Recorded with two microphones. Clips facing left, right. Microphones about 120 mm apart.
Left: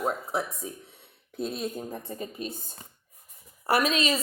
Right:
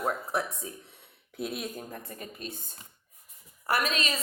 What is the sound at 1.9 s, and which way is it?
Speech, 25° left (ahead or behind).